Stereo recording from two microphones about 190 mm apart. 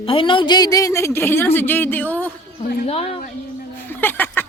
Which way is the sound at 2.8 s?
30° left (ahead or behind).